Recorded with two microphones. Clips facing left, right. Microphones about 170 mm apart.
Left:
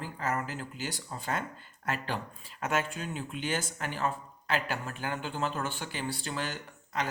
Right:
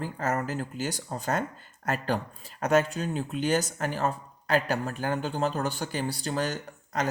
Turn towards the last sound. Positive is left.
turn(degrees=-40)  # may be behind; listen again after turning